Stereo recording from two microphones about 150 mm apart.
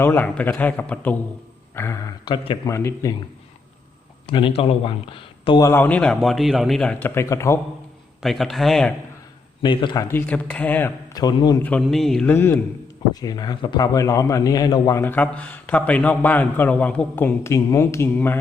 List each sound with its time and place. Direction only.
0.0 s a man's voice: 15° left (ahead or behind); by 2.6 s 35° left (ahead or behind)
2.6 s a man's voice: 20° left (ahead or behind)
4.3 s speech: 35° left (ahead or behind)
5.5 s a man's voice: 15° left (ahead or behind)
7.1 s a man's voice: 20° left (ahead or behind)
8.2 s a man's voice: centre (ahead or behind)
9.6 s speech: 30° left (ahead or behind)
10.1 s a man's voice: 10° left (ahead or behind)
11.1 s a man's voice: 25° left (ahead or behind)
11.6 s a man's voice: 5° left (ahead or behind)
12.3 s a man's voice: 15° left (ahead or behind)
13.1 s a man's voice: 25° left (ahead or behind)
15.0 s a man's voice: 10° left (ahead or behind)